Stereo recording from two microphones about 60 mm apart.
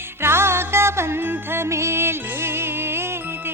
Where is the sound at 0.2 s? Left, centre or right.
Right.